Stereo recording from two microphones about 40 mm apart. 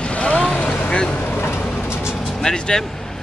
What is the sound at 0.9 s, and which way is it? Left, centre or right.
Speech, left.